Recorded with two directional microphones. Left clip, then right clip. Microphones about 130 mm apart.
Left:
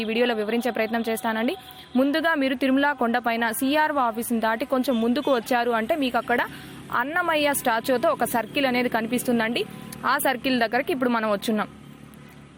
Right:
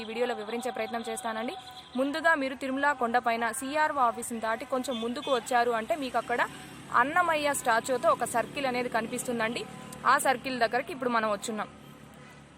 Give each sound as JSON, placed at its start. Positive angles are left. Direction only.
{"t": 0.0, "sound": "a woman's voice", "side_deg": 45}
{"t": 2.0, "sound": "a woman's voice", "side_deg": 35}